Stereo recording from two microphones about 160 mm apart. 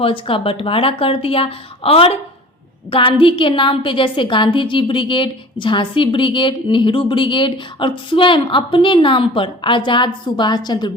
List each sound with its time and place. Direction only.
0.0 s a woman's voice: 35° left (ahead or behind)